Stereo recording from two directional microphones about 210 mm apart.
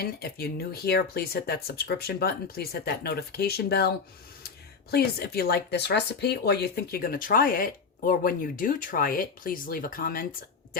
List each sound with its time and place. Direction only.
0.0 s speech: 50° left (ahead or behind)